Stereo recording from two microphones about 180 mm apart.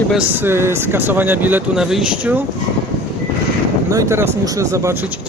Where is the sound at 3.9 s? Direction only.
15° right (ahead or behind).